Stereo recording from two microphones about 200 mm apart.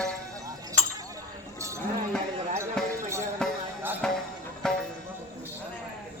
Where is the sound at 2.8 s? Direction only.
Centre (ahead or behind).